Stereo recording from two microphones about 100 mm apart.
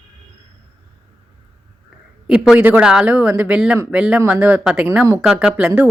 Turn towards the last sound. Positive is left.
turn(degrees=-5)  # may be behind; listen again after turning